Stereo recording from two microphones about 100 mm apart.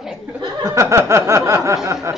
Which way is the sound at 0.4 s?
35° right (ahead or behind).